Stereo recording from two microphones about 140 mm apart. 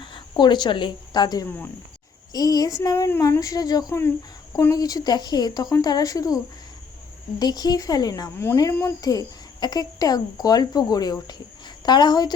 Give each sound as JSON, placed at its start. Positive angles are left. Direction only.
{"t": 0.0, "sound": "speech", "side_deg": 35}
{"t": 1.5, "sound": "speech", "side_deg": 15}
{"t": 2.3, "sound": "speech", "side_deg": 25}